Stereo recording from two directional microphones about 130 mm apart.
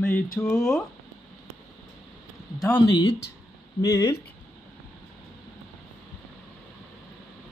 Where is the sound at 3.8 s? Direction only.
25° left (ahead or behind).